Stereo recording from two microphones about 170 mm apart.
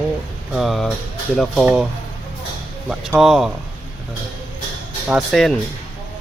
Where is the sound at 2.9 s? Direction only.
Centre (ahead or behind).